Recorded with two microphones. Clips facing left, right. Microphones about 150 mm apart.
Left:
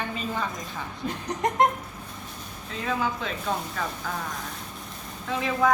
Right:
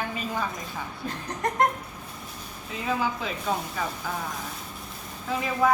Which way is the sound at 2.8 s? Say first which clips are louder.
Even; 10° right (ahead or behind).